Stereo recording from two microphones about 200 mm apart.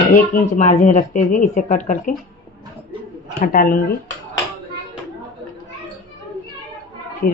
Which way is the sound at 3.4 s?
45° left (ahead or behind).